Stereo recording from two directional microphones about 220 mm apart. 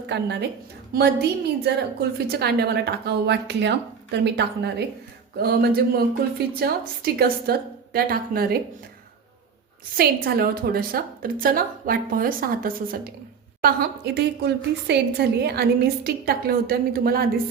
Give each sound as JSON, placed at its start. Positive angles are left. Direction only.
{"t": 0.1, "sound": "a woman's voice", "side_deg": -50}
{"t": 10.0, "sound": "a woman's voice", "side_deg": -45}